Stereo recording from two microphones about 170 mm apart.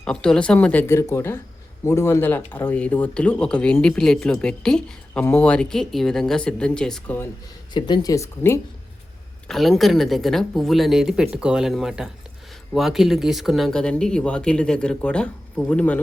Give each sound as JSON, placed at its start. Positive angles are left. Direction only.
{"t": 0.0, "sound": "speech", "side_deg": 5}
{"t": 7.7, "sound": "speech", "side_deg": 25}
{"t": 9.5, "sound": "speech", "side_deg": 0}